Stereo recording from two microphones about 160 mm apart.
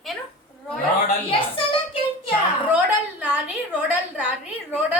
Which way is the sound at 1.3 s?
35° left (ahead or behind).